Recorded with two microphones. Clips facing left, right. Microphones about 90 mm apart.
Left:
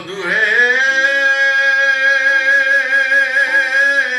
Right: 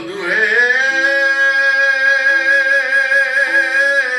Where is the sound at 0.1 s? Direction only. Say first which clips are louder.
Even; 15° right (ahead or behind).